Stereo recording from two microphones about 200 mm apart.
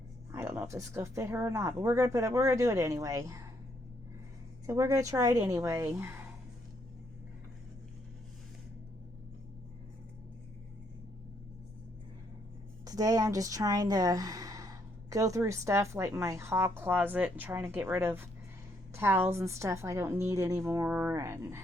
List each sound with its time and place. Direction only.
0.3 s a woman's voice: 15° right (ahead or behind)
4.6 s a woman's voice: 15° right (ahead or behind)
12.8 s a woman's voice: 20° right (ahead or behind)